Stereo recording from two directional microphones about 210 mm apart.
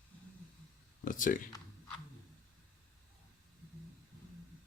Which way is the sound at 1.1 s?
40° left (ahead or behind).